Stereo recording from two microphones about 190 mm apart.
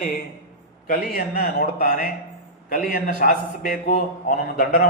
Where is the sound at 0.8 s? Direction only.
50° left (ahead or behind).